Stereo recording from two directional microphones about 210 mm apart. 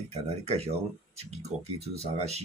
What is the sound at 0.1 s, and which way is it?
Speech, 30° right (ahead or behind).